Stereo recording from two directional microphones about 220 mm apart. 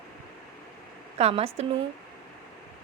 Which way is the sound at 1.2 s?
30° right (ahead or behind).